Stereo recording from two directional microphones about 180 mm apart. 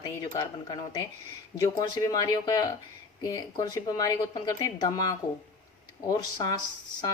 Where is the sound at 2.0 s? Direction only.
20° left (ahead or behind).